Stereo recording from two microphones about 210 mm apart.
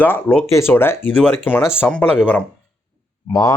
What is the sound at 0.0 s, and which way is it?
Speech, 10° left (ahead or behind).